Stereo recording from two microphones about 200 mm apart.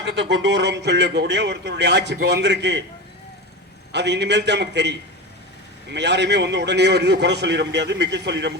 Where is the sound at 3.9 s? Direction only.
60° right (ahead or behind).